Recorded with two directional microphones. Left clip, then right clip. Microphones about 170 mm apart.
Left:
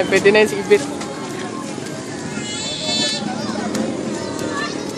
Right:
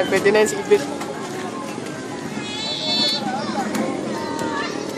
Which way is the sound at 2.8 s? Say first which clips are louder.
Even; 40° left (ahead or behind).